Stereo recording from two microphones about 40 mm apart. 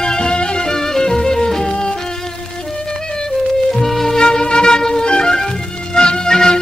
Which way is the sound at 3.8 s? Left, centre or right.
Centre.